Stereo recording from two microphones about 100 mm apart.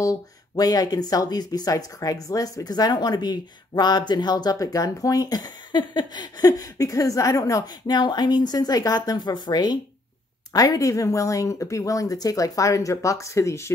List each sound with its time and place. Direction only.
0.0 s speech: 35° left (ahead or behind)